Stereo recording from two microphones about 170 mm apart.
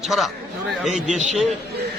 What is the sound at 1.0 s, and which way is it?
Speech, 45° right (ahead or behind).